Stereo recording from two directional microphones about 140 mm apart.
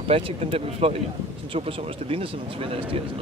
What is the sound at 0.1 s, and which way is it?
Speech, 45° right (ahead or behind).